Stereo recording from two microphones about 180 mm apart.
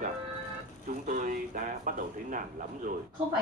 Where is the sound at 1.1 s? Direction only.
45° right (ahead or behind).